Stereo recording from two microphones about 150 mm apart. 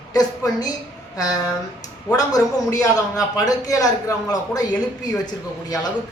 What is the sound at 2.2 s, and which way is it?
A man's voice, 25° left (ahead or behind).